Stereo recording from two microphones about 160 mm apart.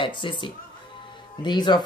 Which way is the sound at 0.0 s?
30° left (ahead or behind).